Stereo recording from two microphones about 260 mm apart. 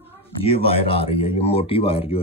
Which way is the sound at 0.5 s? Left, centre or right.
Left.